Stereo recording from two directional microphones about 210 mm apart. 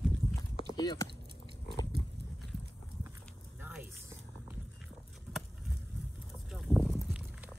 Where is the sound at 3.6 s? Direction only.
5° right (ahead or behind).